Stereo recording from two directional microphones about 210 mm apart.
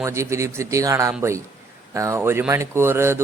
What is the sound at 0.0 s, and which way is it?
Speech, 15° right (ahead or behind).